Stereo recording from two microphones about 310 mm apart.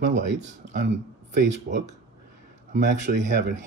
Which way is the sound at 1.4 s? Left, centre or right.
Right.